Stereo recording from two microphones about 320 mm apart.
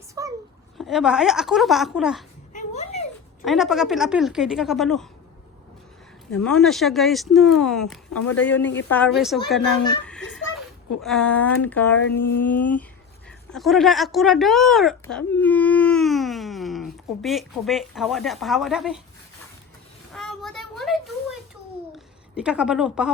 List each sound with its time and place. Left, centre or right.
0.1 s a sound: centre
0.8 s speech: centre
2.5 s a sound: left
3.4 s speech: centre
6.3 s speech: centre
10.1 s a sound: centre
11.0 s speech: centre
20.1 s child singing: centre
21.9 s a woman's voice: centre